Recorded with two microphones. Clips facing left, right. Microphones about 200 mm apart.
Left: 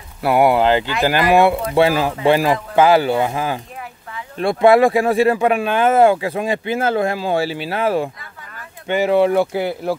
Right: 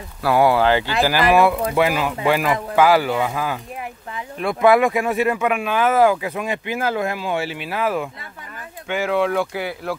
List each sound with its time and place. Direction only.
0.2 s speech: 20° left (ahead or behind)
9.1 s speech: 35° left (ahead or behind)